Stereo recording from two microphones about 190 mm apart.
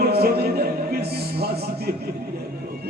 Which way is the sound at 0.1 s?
55° right (ahead or behind).